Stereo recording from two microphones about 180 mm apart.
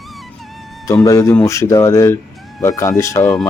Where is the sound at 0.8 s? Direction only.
20° left (ahead or behind).